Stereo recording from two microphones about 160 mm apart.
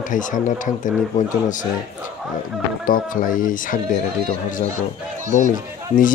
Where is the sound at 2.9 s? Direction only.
60° left (ahead or behind).